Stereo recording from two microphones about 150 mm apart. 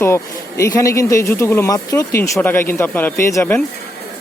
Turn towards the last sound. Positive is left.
turn(degrees=15)  # may be behind; listen again after turning